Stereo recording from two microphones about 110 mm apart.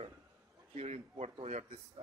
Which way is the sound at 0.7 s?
85° right.